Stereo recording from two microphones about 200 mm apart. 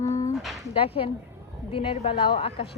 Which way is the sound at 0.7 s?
30° left (ahead or behind).